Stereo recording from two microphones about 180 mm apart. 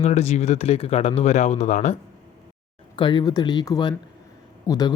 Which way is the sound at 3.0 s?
25° left (ahead or behind).